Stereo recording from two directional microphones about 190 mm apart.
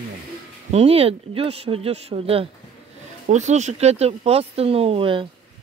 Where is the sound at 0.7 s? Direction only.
30° right (ahead or behind).